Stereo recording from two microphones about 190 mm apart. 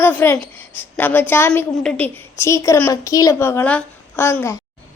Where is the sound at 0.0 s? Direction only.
10° left (ahead or behind).